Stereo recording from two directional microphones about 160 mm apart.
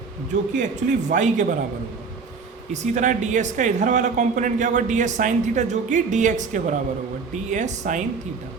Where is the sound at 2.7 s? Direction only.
50° right (ahead or behind).